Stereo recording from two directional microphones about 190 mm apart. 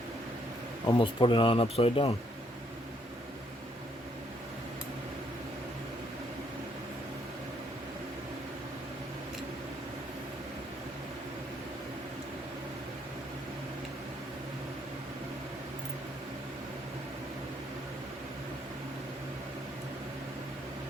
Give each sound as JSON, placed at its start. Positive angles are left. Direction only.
{"t": 0.9, "sound": "speech", "side_deg": 25}